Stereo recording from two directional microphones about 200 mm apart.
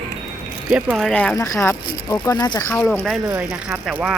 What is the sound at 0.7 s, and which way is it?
Speech, 5° right (ahead or behind).